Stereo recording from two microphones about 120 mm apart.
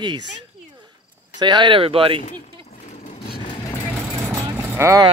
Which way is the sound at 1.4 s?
40° right (ahead or behind).